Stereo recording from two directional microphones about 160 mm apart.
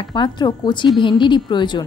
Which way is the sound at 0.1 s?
30° left (ahead or behind).